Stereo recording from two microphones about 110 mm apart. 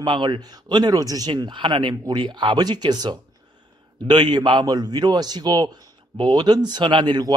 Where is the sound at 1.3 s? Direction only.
45° right (ahead or behind).